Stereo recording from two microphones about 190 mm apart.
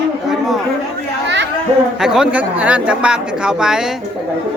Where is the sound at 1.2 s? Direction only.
65° right (ahead or behind).